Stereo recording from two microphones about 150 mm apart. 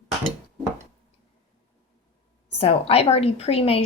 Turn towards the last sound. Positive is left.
turn(degrees=40)  # may be behind; listen again after turning